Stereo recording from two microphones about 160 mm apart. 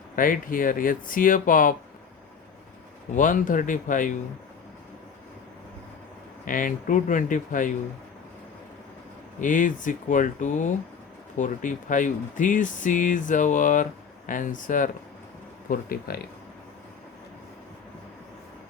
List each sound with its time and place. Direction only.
0.2 s speech: 60° left (ahead or behind)
3.2 s speech: 55° left (ahead or behind)
6.4 s speech: 55° left (ahead or behind)
9.4 s speech: 55° left (ahead or behind)
15.7 s speech: 70° left (ahead or behind)